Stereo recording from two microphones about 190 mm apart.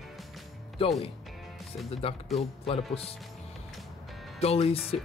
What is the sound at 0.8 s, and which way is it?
Speech, 30° left (ahead or behind).